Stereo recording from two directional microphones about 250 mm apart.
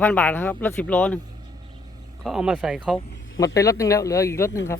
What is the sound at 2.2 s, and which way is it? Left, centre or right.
Speech, centre.